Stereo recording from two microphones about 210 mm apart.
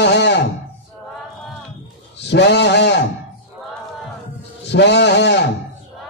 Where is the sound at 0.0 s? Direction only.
55° left (ahead or behind).